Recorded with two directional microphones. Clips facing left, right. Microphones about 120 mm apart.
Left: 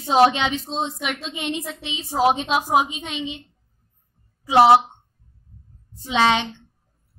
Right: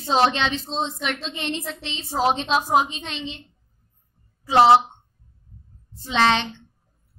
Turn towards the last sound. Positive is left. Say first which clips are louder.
# left 1 dB
turn(degrees=15)  # may be behind; listen again after turning